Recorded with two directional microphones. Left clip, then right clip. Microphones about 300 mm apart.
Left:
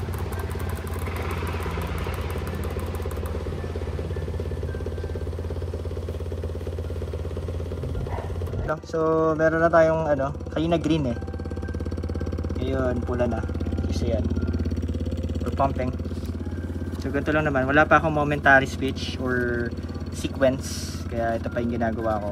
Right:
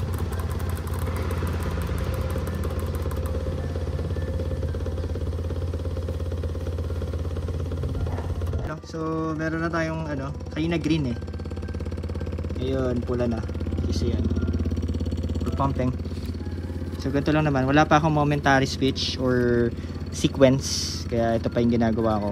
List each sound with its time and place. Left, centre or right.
8.9 s speech: centre
12.6 s speech: centre
15.4 s speech: centre
17.0 s speech: centre